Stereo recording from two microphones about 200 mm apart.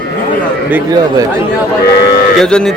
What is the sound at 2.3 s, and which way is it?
Speech, 5° left (ahead or behind).